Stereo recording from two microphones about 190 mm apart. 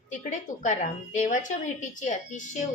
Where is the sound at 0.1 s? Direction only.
40° left (ahead or behind).